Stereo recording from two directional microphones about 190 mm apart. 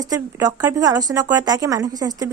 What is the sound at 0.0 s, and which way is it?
Speech, 20° right (ahead or behind).